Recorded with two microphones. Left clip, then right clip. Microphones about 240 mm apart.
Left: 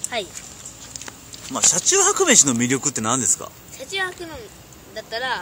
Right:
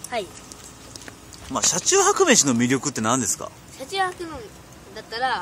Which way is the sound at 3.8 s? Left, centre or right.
Centre.